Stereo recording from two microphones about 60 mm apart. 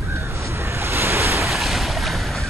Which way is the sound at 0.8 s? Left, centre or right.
Right.